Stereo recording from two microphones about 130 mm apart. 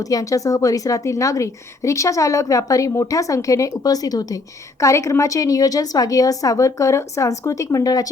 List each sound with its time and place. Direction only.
0.0 s a woman's voice: 25° left (ahead or behind)